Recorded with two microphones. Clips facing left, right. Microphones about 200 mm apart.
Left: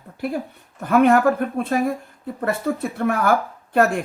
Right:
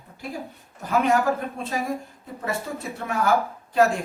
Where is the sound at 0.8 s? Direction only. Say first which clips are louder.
Left 6 dB; 55° left (ahead or behind).